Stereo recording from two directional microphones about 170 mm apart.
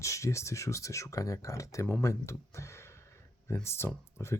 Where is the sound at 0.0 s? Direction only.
20° left (ahead or behind).